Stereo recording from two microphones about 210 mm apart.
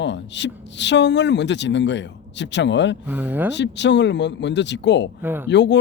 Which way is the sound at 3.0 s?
10° right (ahead or behind).